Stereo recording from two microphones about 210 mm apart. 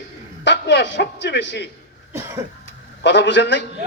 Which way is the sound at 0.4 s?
55° left (ahead or behind).